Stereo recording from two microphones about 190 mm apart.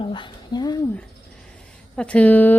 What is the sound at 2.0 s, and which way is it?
Speech, 5° left (ahead or behind).